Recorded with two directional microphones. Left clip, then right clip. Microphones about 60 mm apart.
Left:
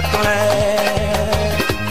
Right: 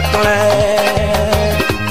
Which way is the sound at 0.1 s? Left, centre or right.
Left.